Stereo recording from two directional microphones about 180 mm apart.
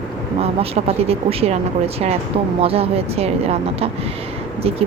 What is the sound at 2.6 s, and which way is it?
Speech, 35° right (ahead or behind).